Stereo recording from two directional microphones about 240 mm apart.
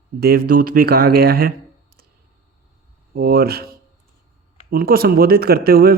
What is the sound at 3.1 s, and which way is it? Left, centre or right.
Speech, right.